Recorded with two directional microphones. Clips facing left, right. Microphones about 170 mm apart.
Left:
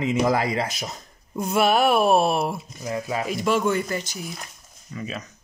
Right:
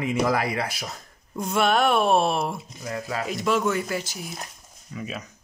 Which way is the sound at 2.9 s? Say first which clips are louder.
Left 3 dB; 20° left (ahead or behind).